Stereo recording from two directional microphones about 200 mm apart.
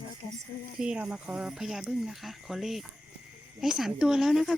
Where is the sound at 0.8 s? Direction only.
5° right (ahead or behind).